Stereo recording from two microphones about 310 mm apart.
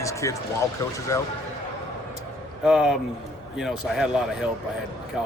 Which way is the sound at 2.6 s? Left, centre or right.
Centre.